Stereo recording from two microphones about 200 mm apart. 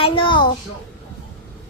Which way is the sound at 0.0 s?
25° left (ahead or behind).